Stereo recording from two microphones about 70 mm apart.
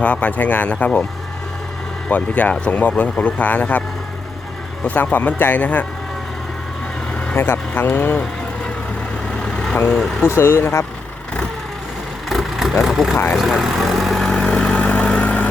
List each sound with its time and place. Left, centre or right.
0.0 s speech: centre
2.0 s speech: left
5.1 s speech: left
7.3 s speech: left
9.4 s vehicle: centre
9.9 s speech: centre
10.2 s speech: left
12.3 s vehicle: centre